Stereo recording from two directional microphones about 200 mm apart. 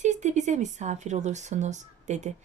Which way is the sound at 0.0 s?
35° right (ahead or behind).